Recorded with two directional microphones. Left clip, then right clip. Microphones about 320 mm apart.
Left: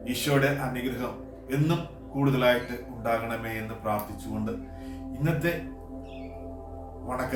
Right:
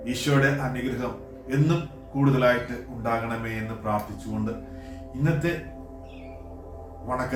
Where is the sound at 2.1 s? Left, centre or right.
Centre.